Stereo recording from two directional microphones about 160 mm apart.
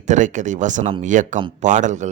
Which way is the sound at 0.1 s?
50° right (ahead or behind).